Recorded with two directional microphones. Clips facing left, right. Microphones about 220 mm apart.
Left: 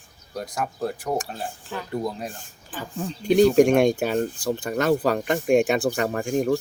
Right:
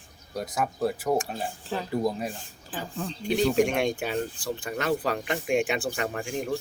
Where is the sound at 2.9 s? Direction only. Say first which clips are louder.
Left 5 dB; 10° left (ahead or behind).